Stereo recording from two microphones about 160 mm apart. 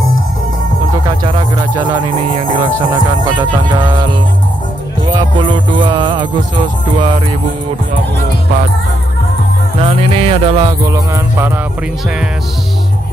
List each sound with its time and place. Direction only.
2.9 s music: 30° right (ahead or behind)
9.8 s music: 35° right (ahead or behind)
10.9 s music: 15° right (ahead or behind)